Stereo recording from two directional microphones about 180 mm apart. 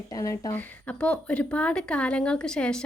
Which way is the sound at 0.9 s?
5° left (ahead or behind).